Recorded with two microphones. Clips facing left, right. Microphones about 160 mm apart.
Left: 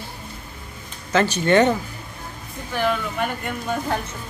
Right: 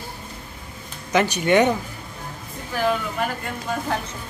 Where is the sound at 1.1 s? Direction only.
15° right (ahead or behind).